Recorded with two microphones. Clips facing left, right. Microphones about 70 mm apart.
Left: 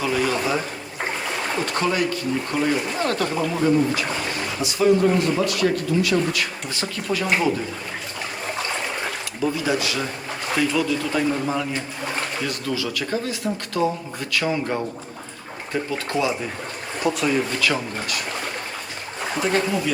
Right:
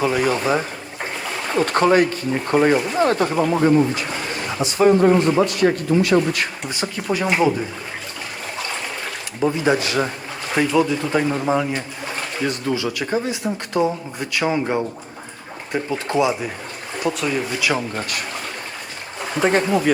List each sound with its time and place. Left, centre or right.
0.0 s speech: right
1.6 s speech: right
3.0 s speech: right
3.5 s a man's voice: right
6.7 s speech: centre
9.4 s a man's voice: right
17.0 s speech: centre
17.6 s speech: centre
19.4 s a man's voice: right